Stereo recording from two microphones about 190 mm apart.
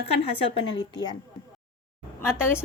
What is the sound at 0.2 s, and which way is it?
Speech, 25° left (ahead or behind).